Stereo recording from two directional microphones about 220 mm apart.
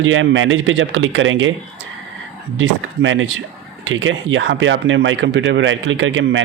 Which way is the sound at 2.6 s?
60° right (ahead or behind).